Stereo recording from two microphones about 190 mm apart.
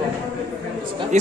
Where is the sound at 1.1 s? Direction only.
40° right (ahead or behind).